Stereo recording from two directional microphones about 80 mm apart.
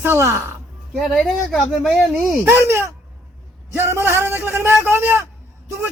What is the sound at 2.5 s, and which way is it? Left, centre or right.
A man's voice, right.